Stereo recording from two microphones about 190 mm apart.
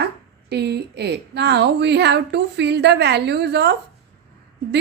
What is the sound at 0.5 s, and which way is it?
Speech, 60° right (ahead or behind).